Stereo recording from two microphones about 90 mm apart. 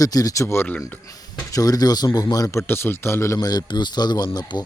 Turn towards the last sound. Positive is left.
turn(degrees=55)  # may be behind; listen again after turning